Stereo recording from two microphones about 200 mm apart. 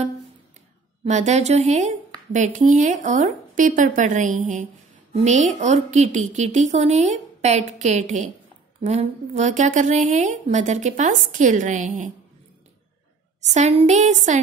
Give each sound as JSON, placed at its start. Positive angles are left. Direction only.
{"t": 1.0, "sound": "speech", "side_deg": -35}
{"t": 13.5, "sound": "speech", "side_deg": -35}